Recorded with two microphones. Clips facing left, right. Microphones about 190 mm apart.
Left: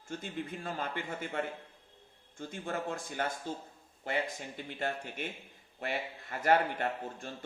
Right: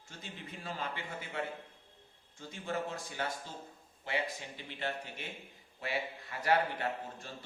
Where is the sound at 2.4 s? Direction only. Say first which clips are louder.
Left 1 dB; 50° left (ahead or behind).